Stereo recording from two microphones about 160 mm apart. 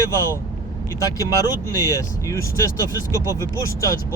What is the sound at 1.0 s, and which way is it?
Speech, 20° left (ahead or behind).